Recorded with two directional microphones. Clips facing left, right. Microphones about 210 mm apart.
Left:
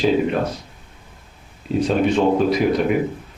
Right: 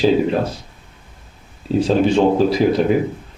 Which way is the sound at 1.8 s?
30° right (ahead or behind).